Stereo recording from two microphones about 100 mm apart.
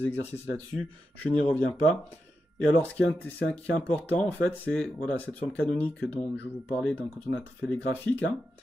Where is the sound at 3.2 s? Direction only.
15° left (ahead or behind).